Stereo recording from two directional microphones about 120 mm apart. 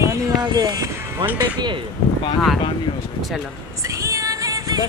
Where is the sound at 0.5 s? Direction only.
35° right (ahead or behind).